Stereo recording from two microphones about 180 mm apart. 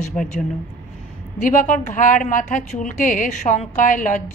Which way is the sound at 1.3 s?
45° left (ahead or behind).